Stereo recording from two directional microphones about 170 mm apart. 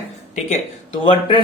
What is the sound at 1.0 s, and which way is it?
Speech, 30° left (ahead or behind).